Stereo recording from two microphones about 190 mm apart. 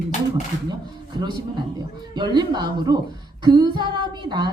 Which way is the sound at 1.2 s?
25° right (ahead or behind).